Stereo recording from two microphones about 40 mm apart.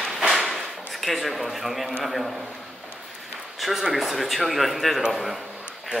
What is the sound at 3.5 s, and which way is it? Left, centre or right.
Speech, centre.